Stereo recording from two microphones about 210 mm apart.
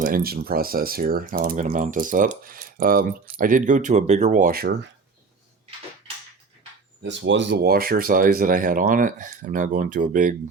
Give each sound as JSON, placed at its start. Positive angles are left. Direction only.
{"t": 0.0, "sound": "speech", "side_deg": -45}
{"t": 7.0, "sound": "speech", "side_deg": -60}